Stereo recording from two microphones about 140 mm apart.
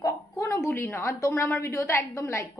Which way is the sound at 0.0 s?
20° left (ahead or behind).